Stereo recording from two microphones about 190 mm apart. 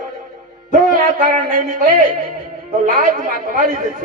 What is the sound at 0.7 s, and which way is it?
A man's voice, 45° right (ahead or behind).